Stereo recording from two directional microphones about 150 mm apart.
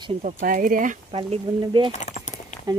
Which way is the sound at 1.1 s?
35° right (ahead or behind).